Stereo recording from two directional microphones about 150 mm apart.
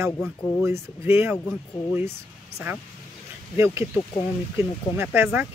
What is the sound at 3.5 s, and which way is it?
Speech, 15° right (ahead or behind).